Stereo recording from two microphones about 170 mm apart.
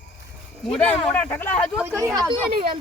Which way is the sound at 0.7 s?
5° left (ahead or behind).